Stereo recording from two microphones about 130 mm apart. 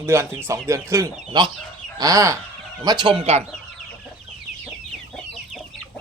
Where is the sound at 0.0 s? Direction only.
20° right (ahead or behind).